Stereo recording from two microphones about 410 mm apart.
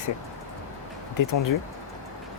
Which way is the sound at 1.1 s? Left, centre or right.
Left.